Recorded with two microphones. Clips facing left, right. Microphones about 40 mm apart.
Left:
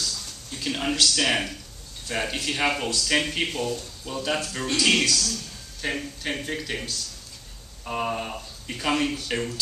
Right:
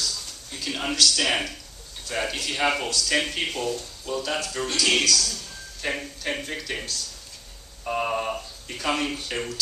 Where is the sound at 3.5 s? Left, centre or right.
Centre.